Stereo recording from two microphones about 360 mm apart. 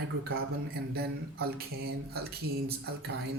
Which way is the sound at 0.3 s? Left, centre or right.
Right.